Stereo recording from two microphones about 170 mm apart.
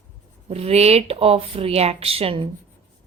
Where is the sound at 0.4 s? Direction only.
35° right (ahead or behind).